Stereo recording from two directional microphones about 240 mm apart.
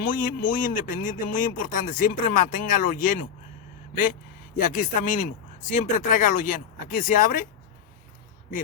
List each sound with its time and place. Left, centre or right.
0.0 s a man's voice: left